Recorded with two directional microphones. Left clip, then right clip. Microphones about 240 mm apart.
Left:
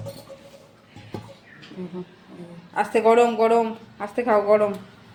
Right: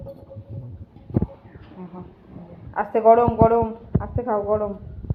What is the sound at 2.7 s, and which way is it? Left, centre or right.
A woman's voice, centre.